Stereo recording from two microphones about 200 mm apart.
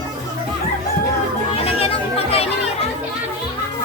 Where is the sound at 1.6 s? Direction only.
30° left (ahead or behind).